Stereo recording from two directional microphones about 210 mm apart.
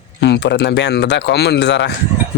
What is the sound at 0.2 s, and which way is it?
Speech, 55° left (ahead or behind).